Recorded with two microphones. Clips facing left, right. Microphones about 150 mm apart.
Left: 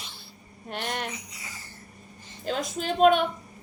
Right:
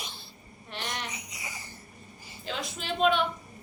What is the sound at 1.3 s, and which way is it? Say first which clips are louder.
Speech: right 2 dB; 15° right (ahead or behind).